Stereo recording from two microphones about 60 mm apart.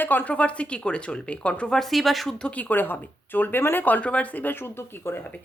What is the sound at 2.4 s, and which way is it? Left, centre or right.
A woman's voice, left.